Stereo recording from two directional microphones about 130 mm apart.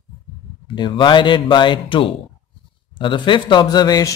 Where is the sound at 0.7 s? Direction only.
35° left (ahead or behind).